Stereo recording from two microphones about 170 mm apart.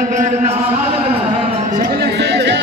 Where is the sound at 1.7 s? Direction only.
55° right (ahead or behind); by 2.6 s 85° right.